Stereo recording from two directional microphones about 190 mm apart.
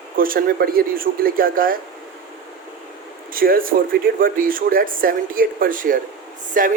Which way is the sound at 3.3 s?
50° right (ahead or behind).